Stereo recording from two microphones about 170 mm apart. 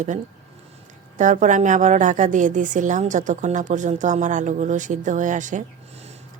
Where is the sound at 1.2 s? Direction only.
50° right (ahead or behind).